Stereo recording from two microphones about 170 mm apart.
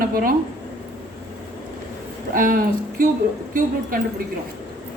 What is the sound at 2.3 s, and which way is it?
Speech, 55° right (ahead or behind).